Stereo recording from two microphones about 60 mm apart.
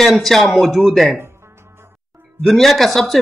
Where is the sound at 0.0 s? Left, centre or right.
Centre.